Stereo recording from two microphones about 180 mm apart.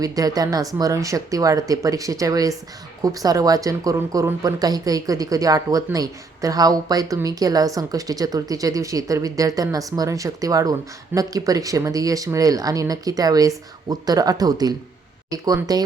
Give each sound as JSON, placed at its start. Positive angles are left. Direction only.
{"t": 0.0, "sound": "speech", "side_deg": -20}